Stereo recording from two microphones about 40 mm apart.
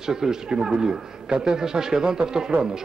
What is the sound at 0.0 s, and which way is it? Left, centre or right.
A man's voice, centre.